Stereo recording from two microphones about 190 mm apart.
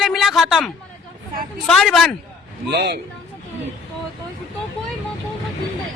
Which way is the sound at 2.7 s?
60° right (ahead or behind).